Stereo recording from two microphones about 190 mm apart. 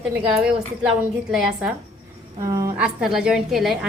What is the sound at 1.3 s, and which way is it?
Speech, centre (ahead or behind).